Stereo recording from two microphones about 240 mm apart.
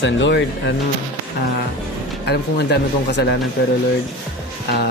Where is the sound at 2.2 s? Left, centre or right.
Left.